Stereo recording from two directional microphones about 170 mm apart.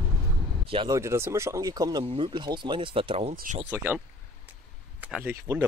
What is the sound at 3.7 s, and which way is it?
Speech, 10° right (ahead or behind).